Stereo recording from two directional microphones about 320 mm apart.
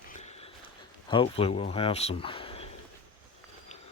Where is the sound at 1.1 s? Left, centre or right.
Centre.